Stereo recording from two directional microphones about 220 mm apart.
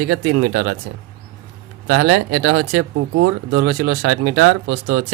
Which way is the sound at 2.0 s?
90° right.